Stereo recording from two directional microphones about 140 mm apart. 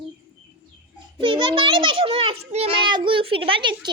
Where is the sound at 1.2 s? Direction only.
35° right (ahead or behind).